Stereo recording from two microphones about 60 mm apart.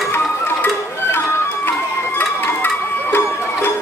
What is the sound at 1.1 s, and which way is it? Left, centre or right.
Crowd, left.